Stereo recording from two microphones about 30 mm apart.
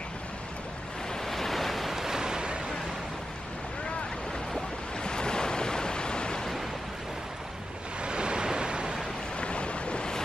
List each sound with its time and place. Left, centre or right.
1.1 s waves: centre
2.0 s a sound: centre
5.0 s waves: left
8.0 s waves: right
9.4 s boat: left